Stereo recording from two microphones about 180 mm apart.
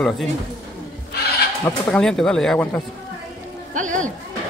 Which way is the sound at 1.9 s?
5° left (ahead or behind).